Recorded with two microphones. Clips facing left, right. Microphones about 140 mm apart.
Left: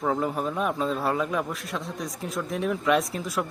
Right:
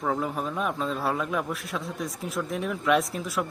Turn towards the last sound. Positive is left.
turn(degrees=0)  # may be behind; listen again after turning